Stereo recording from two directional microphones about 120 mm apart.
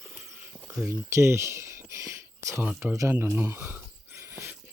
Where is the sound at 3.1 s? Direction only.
20° right (ahead or behind).